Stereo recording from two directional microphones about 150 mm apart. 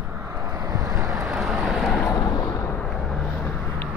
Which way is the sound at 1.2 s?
5° right (ahead or behind).